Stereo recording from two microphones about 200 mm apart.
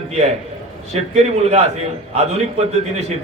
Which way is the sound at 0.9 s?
30° right (ahead or behind).